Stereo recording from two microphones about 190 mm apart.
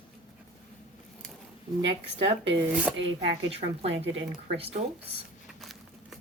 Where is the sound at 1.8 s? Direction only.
30° right (ahead or behind).